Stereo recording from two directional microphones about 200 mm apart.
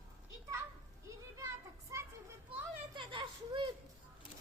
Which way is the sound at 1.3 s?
15° right (ahead or behind).